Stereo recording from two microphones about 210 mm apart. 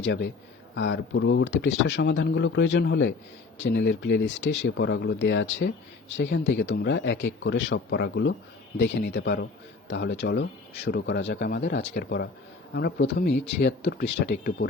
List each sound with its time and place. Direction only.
0.8 s speech: 60° left (ahead or behind)